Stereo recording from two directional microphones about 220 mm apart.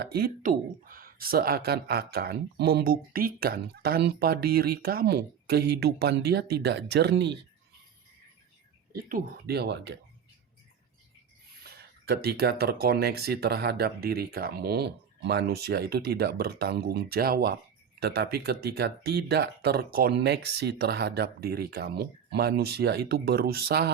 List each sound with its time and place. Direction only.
0.0 s speech: 45° right (ahead or behind)
8.9 s speech: 40° right (ahead or behind)
11.6 s speech: 45° right (ahead or behind)